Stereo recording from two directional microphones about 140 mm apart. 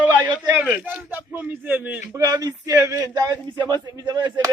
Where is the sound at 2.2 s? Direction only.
25° right (ahead or behind).